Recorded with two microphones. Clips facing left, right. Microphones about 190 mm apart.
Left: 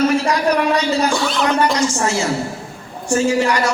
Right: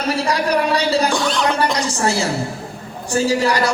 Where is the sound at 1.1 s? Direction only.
5° left (ahead or behind).